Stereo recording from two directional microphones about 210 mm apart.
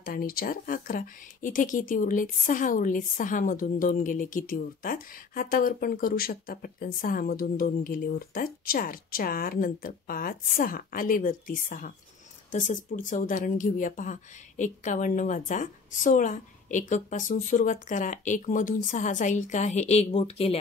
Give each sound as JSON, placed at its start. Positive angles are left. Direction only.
{"t": 0.0, "sound": "a woman's voice", "side_deg": 45}